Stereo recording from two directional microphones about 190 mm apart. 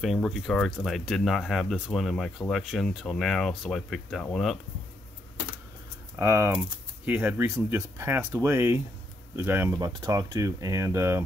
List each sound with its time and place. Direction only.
0.0 s speech: centre (ahead or behind)
6.1 s speech: 15° right (ahead or behind)